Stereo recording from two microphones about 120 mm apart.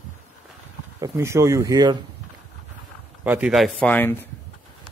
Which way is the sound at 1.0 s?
25° right (ahead or behind).